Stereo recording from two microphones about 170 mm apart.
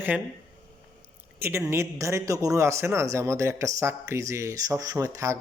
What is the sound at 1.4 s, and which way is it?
Speech, 15° right (ahead or behind).